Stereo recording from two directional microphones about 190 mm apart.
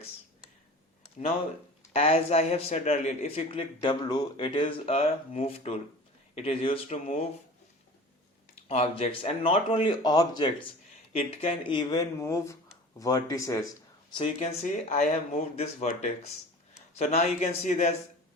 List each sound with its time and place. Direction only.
1.9 s a man's voice: 30° left (ahead or behind)
8.5 s speech: 35° left (ahead or behind); by 13.7 s 15° left (ahead or behind)
14.1 s a man's voice: 30° left (ahead or behind)